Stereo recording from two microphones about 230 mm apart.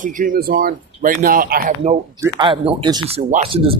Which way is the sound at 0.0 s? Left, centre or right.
Right.